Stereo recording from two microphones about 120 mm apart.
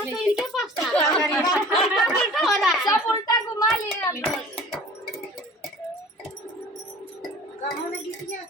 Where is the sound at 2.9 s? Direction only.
30° left (ahead or behind).